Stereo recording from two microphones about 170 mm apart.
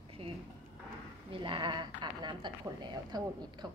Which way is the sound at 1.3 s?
30° right (ahead or behind).